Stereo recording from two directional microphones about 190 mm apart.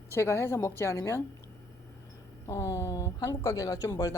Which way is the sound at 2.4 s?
15° left (ahead or behind).